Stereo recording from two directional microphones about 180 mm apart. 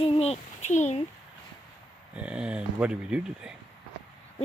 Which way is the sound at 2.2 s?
5° right (ahead or behind).